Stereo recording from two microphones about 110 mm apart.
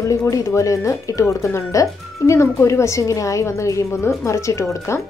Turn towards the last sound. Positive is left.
turn(degrees=30)  # may be behind; listen again after turning